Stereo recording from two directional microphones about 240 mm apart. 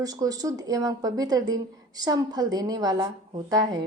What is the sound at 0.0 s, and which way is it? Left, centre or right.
A woman's voice, centre.